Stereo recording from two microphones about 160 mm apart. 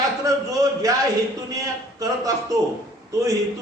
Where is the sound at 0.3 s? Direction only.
20° right (ahead or behind).